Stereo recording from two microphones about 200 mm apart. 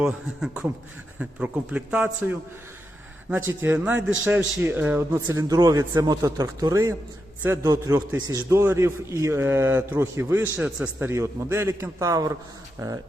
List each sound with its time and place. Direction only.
0.0 s a man's voice: 5° right (ahead or behind)